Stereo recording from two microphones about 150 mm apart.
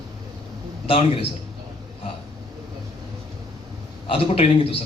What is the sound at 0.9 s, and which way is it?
Speech, 40° left (ahead or behind).